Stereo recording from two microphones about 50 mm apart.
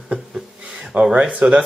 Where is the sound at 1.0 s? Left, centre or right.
Centre.